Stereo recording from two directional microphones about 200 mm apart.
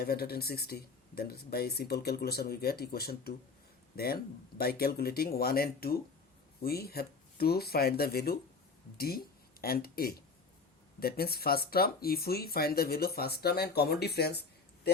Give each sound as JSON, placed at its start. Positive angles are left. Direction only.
{"t": 0.0, "sound": "speech", "side_deg": 50}